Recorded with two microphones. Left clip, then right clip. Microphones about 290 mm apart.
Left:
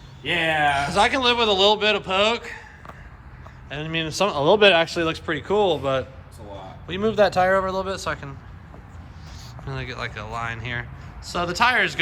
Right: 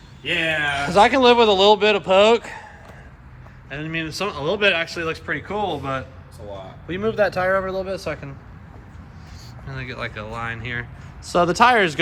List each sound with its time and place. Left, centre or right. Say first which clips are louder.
0.2 s speech: even; left
0.7 s a man's voice: right 4 dB; centre
3.7 s a man's voice: even; centre
9.6 s speech: right 1 dB; centre